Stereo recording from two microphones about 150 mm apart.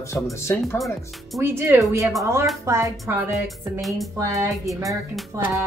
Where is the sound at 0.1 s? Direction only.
20° left (ahead or behind).